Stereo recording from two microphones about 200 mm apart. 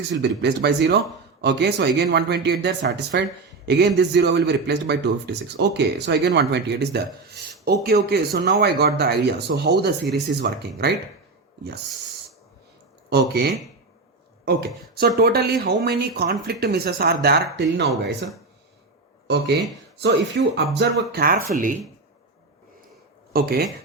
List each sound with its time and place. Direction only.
0.2 s a man's voice: 55° right (ahead or behind)
13.1 s speech: 55° right (ahead or behind)
19.3 s a man's voice: 60° right (ahead or behind); by 21.8 s 40° right (ahead or behind)
23.3 s speech: 50° right (ahead or behind)